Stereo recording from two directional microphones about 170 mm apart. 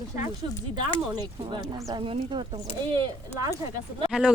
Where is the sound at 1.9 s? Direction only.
30° right (ahead or behind).